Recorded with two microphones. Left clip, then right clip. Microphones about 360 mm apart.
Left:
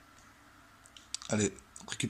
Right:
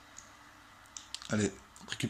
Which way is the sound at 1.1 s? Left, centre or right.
Left.